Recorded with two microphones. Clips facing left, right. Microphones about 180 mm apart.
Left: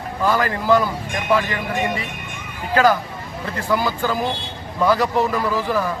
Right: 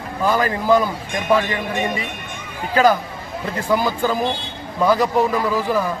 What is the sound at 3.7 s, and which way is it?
A man's voice, 20° right (ahead or behind).